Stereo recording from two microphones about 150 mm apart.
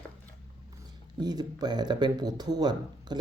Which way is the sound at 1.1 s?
25° right (ahead or behind).